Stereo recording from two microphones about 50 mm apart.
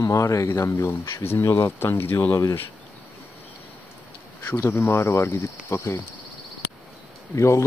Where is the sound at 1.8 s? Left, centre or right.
Left.